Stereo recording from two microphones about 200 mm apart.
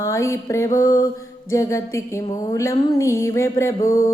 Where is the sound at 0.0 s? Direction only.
15° left (ahead or behind).